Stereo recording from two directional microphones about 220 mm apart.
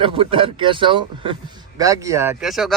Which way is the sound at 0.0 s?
25° right (ahead or behind).